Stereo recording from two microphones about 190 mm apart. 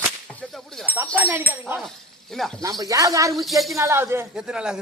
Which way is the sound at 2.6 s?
20° right (ahead or behind).